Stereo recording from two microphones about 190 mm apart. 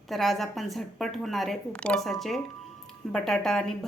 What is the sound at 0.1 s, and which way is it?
A woman's voice, centre (ahead or behind).